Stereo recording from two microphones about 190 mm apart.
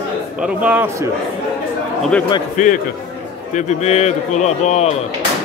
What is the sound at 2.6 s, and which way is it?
A man's voice, 40° left (ahead or behind).